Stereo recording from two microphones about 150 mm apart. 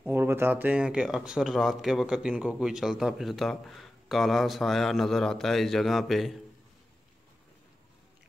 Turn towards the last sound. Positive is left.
turn(degrees=0)  # may be behind; listen again after turning